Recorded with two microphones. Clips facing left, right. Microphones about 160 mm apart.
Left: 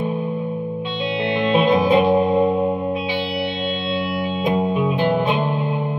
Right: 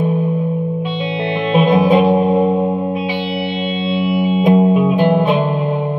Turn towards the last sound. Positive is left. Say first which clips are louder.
# right 6 dB
turn(degrees=-15)  # may be behind; listen again after turning